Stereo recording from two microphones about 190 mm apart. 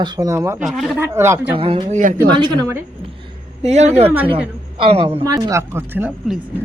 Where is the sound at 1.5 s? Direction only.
30° right (ahead or behind).